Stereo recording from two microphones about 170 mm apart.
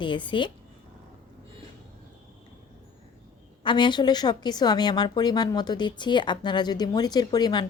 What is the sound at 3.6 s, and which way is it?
A woman's voice, 30° left (ahead or behind).